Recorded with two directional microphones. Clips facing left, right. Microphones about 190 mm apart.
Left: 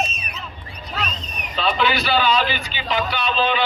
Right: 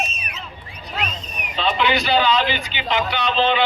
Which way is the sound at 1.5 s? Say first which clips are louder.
Right 1 dB; 20° right (ahead or behind).